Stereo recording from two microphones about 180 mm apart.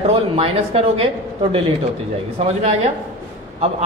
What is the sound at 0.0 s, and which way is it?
Speech, 35° right (ahead or behind).